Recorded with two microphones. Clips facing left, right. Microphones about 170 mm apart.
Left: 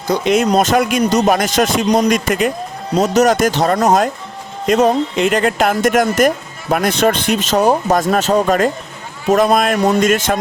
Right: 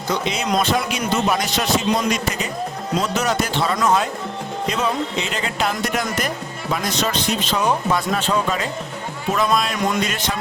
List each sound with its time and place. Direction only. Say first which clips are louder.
0.4 s speech: left 7 dB; 40° left (ahead or behind)